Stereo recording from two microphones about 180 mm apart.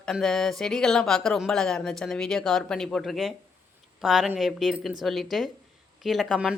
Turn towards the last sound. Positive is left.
turn(degrees=0)  # may be behind; listen again after turning